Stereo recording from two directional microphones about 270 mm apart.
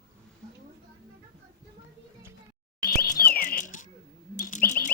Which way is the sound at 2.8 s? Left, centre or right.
Left.